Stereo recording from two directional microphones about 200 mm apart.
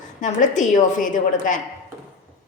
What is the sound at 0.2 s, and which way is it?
A woman's voice, 40° left (ahead or behind).